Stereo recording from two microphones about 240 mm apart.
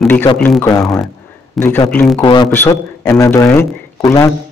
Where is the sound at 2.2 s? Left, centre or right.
Centre.